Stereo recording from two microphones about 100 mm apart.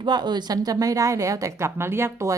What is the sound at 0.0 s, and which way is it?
A woman's voice, 45° right (ahead or behind).